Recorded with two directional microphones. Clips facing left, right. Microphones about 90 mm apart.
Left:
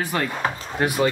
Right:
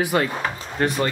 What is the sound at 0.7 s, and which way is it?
Speech, 10° left (ahead or behind).